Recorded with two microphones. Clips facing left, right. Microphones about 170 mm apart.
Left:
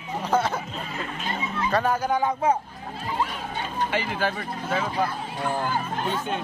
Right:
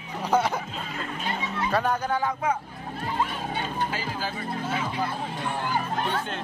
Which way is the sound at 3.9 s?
65° left (ahead or behind).